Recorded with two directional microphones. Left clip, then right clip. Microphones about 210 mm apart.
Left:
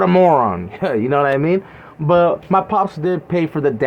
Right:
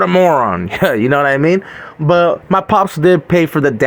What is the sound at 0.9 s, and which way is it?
Speech, 20° right (ahead or behind).